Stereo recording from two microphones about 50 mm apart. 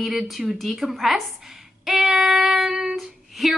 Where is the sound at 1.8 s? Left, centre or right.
Centre.